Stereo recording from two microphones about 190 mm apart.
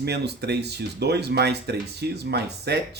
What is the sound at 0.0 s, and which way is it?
Speech, 60° right (ahead or behind).